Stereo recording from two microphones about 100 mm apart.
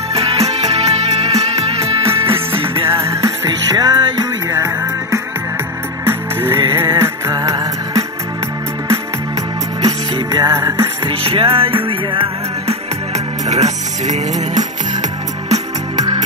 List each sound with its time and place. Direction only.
0.1 s music: 90° right
2.3 s music: 65° right (ahead or behind)
2.9 s music: 30° right (ahead or behind)
3.4 s music: 45° right (ahead or behind)
7.0 s music: 30° right (ahead or behind)
10.1 s music: 40° right (ahead or behind)
11.1 s music: 65° right (ahead or behind)